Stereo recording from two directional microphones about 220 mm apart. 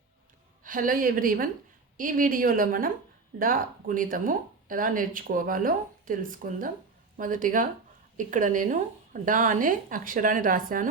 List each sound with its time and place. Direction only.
0.6 s speech: 40° right (ahead or behind)